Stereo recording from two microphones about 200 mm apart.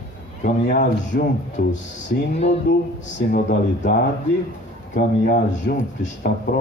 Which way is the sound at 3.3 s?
50° left (ahead or behind).